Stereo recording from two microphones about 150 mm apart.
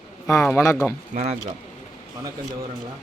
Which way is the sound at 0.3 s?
20° left (ahead or behind).